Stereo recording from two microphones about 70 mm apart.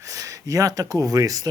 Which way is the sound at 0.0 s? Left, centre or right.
Right.